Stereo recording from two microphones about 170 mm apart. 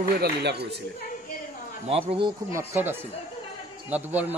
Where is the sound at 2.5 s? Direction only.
15° right (ahead or behind).